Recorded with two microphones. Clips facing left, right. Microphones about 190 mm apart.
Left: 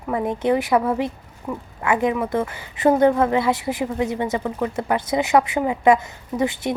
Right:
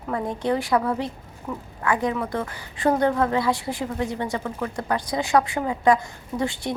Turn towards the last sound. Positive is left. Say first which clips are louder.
# left 4 dB
turn(degrees=20)  # may be behind; listen again after turning